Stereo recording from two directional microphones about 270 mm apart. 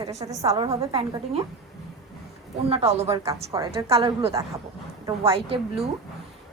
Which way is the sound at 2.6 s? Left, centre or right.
Right.